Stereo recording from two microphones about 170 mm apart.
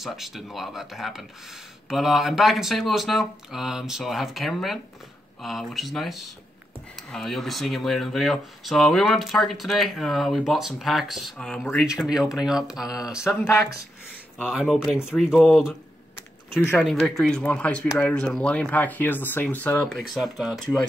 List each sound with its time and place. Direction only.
0.0 s speech: centre (ahead or behind)
13.4 s speech: 15° left (ahead or behind)
14.5 s speech: 5° right (ahead or behind)
16.2 s a sound: 15° left (ahead or behind)
16.7 s speech: centre (ahead or behind)